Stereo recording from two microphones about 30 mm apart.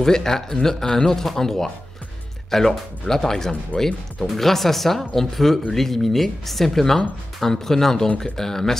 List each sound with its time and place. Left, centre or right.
0.0 s speech: centre